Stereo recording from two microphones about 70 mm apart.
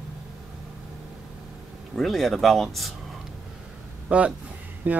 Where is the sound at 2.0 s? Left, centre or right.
Centre.